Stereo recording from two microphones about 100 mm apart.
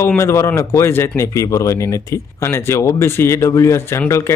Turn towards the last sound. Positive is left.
turn(degrees=30)  # may be behind; listen again after turning